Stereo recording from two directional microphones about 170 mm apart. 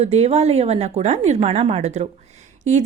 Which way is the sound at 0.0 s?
40° right (ahead or behind).